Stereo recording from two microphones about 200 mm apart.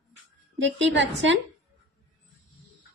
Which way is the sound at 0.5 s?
65° right (ahead or behind).